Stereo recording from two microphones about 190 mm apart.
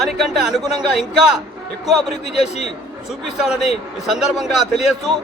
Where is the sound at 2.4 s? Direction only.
35° left (ahead or behind).